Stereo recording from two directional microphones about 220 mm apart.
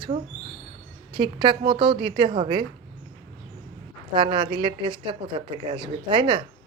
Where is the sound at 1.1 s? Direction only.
20° right (ahead or behind).